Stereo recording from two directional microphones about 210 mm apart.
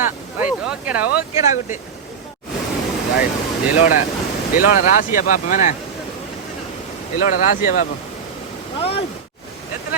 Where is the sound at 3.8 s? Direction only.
40° left (ahead or behind).